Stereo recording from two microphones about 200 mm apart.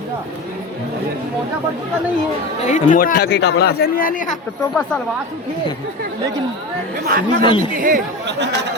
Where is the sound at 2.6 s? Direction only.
40° left (ahead or behind).